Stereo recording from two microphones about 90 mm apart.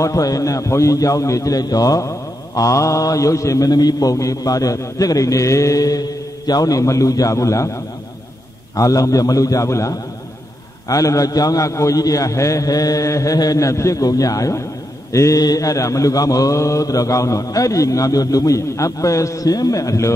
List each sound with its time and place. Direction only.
0.0 s a man's voice: 40° left (ahead or behind)